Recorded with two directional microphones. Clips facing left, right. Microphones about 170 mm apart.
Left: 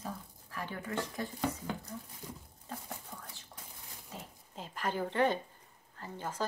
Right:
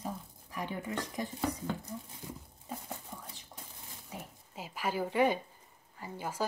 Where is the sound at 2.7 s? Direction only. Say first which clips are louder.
Right 2 dB; 15° right (ahead or behind).